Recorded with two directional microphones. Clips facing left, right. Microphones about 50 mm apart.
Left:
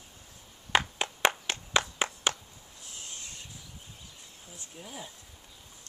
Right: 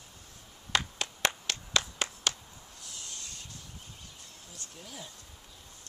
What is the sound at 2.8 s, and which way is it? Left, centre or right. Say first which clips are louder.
Rub: left 1 dB; left.